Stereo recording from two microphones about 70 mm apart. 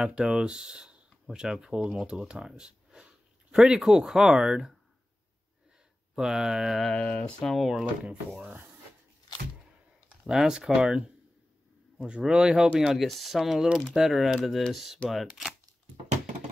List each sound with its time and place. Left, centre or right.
0.0 s speech: centre
6.1 s speech: centre
6.9 s speech: centre
7.4 s speech: centre
7.7 s speech: centre
10.0 s speech: centre